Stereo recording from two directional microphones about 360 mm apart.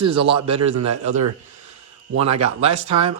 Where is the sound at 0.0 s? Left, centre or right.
Centre.